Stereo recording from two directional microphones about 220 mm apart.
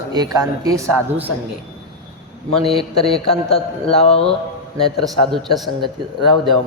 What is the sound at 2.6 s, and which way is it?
A man's voice, 25° left (ahead or behind).